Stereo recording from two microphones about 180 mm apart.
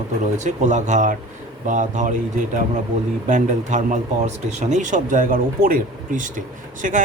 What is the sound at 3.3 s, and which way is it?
Speech, 45° right (ahead or behind).